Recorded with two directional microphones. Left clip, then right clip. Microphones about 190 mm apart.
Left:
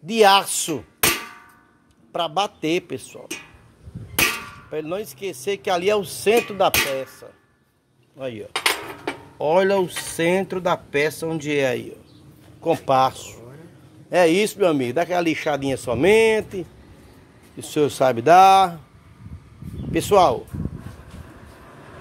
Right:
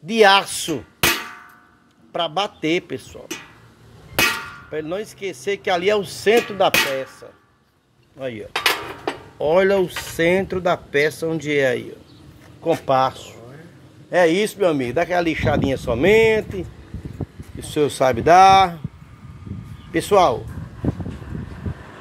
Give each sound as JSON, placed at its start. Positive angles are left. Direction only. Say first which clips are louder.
{"t": 0.0, "sound": "speech", "louder": "right 1 dB", "side_deg": 15}
{"t": 2.1, "sound": "speech", "louder": "right 1 dB", "side_deg": 15}
{"t": 4.6, "sound": "speech", "louder": "even", "side_deg": 15}
{"t": 19.9, "sound": "speech", "louder": "even", "side_deg": 20}